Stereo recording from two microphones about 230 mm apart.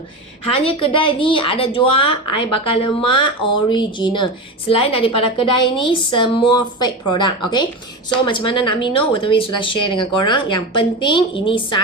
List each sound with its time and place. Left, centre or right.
0.5 s speech: left